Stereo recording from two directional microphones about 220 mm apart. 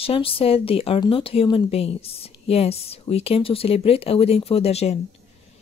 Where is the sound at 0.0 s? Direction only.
25° left (ahead or behind).